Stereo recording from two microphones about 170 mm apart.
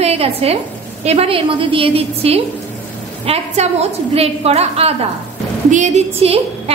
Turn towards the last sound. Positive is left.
turn(degrees=-35)  # may be behind; listen again after turning